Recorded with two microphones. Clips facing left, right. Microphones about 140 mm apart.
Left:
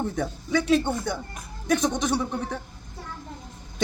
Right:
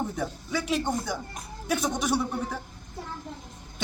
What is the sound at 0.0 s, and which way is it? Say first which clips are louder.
Speech: left 3 dB; 10° right (ahead or behind).